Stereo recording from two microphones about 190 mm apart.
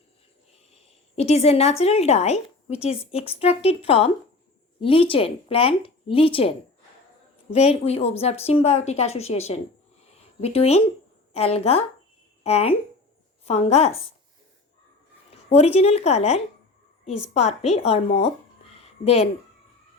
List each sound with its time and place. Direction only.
0.8 s a woman's voice: 35° left (ahead or behind)
7.5 s a woman's voice: 35° left (ahead or behind)
15.4 s a woman's voice: 35° left (ahead or behind)